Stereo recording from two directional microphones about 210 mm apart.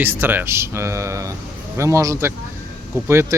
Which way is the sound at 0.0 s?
10° right (ahead or behind).